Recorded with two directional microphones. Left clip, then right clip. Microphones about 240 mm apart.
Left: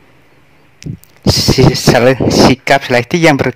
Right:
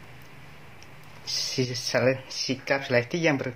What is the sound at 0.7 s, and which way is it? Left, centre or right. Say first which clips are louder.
Speech: left 13 dB; left.